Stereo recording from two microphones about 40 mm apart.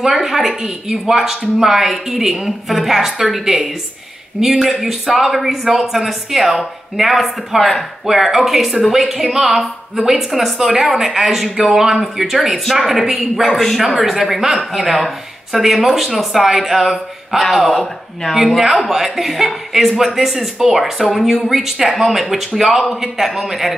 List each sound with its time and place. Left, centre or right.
0.0 s a man's voice: centre